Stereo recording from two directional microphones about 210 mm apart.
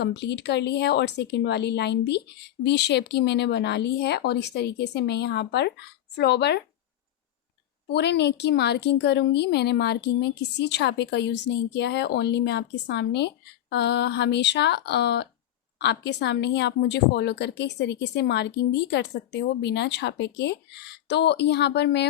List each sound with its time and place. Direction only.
0.0 s a woman's voice: 55° left (ahead or behind)
7.9 s a woman's voice: 55° left (ahead or behind)